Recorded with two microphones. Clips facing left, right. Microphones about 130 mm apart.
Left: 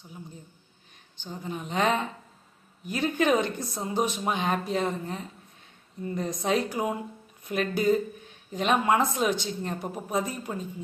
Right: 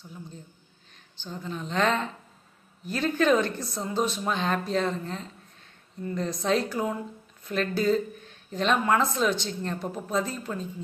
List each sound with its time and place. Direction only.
1.2 s speech: 15° left (ahead or behind)